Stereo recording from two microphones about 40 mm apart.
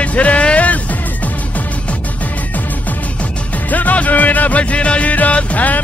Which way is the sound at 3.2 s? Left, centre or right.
Left.